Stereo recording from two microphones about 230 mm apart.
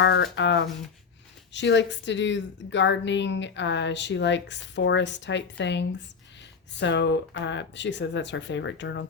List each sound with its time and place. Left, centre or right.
0.0 s a woman's voice: left